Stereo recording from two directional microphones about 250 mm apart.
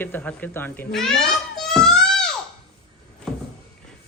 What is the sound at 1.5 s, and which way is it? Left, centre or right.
Music, centre.